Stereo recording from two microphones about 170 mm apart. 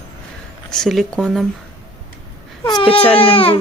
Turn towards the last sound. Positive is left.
turn(degrees=30)  # may be behind; listen again after turning